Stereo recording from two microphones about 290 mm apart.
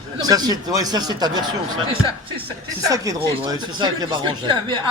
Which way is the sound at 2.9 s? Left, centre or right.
Centre.